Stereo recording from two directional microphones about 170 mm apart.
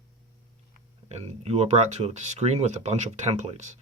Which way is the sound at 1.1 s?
40° right (ahead or behind).